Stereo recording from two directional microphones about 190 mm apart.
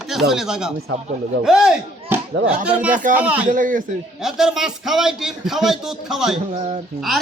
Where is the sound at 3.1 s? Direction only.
5° right (ahead or behind).